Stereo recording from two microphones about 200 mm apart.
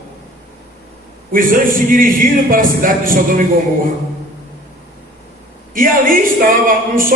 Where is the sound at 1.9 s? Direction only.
45° right (ahead or behind).